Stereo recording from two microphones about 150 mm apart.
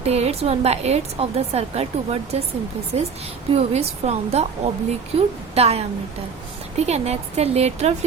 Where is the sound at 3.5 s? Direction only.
45° right (ahead or behind).